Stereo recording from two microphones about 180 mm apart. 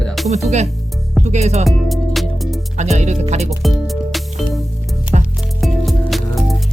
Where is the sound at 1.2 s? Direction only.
40° right (ahead or behind).